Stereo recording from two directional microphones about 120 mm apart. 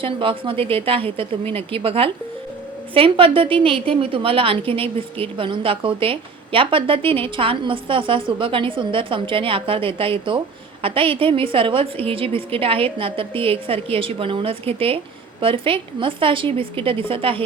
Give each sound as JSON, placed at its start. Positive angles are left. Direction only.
{"t": 0.0, "sound": "a woman's voice", "side_deg": -45}